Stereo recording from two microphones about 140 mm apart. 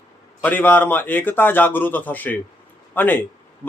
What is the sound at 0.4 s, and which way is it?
A man's voice, 15° left (ahead or behind).